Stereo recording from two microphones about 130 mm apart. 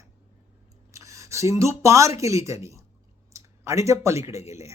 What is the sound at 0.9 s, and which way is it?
Speech, 25° right (ahead or behind).